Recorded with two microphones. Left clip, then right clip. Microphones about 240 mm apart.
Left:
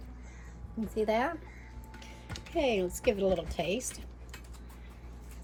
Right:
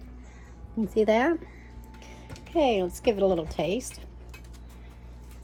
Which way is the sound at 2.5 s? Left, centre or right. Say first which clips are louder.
Right 6 dB; centre.